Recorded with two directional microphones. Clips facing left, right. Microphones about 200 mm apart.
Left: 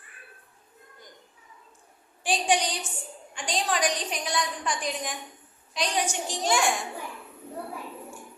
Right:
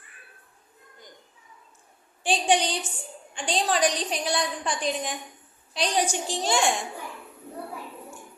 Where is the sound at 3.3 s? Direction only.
30° right (ahead or behind).